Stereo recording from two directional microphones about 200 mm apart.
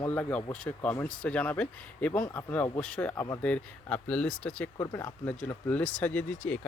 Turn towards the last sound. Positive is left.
turn(degrees=10)  # may be behind; listen again after turning